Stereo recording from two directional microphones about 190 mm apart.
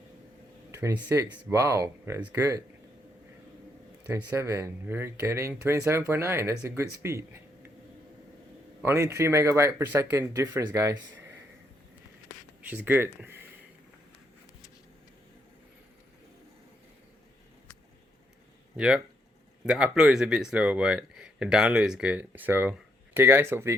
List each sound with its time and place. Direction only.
0.7 s speech: 15° right (ahead or behind)
4.0 s speech: 10° right (ahead or behind)
8.8 s speech: 15° right (ahead or behind)
12.6 s speech: 10° right (ahead or behind)
18.8 s speech: 5° right (ahead or behind)